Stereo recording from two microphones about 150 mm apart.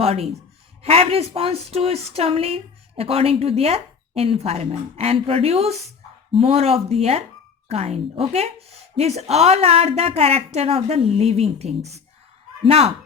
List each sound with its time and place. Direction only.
0.0 s a woman's voice: 45° right (ahead or behind)